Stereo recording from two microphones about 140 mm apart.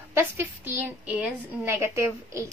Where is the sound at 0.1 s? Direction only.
15° right (ahead or behind).